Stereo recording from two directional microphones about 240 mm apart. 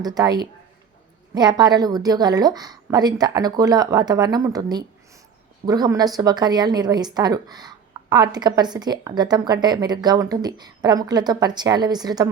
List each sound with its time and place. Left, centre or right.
0.0 s a woman's voice: centre